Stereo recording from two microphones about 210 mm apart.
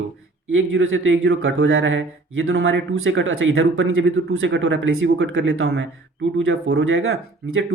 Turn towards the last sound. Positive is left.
turn(degrees=-65)  # may be behind; listen again after turning